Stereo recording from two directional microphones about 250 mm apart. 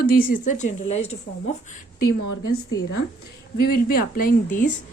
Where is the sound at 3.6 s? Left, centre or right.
Left.